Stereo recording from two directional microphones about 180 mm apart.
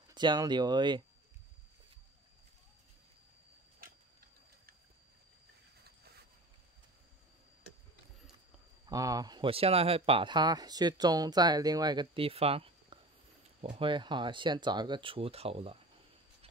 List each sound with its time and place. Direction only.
0.1 s speech: 25° right (ahead or behind)
5.9 s a sound: 65° right (ahead or behind)
8.8 s speech: 20° right (ahead or behind)